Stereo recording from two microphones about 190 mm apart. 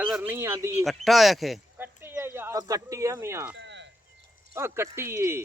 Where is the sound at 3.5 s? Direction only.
70° right (ahead or behind).